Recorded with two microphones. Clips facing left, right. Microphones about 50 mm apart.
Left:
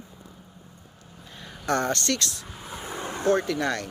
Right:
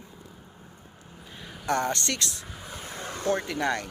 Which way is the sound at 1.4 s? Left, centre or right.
Centre.